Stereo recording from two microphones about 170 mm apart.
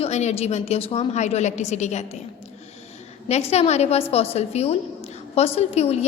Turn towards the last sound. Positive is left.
turn(degrees=40)  # may be behind; listen again after turning